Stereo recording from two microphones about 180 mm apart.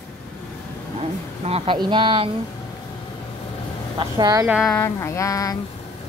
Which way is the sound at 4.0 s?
20° right (ahead or behind).